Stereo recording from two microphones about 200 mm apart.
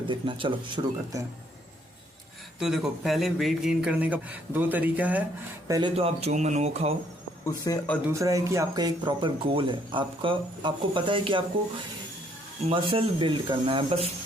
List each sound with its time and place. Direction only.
0.1 s speech: 25° right (ahead or behind)
2.6 s speech: centre (ahead or behind); by 5.9 s 20° right (ahead or behind)
5.9 s speech: 30° right (ahead or behind)
7.4 s speech: 15° left (ahead or behind)
8.1 s speech: 15° right (ahead or behind)
12.6 s speech: 25° right (ahead or behind)